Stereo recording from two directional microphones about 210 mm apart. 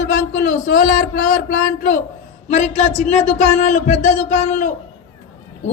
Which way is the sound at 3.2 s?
35° left (ahead or behind).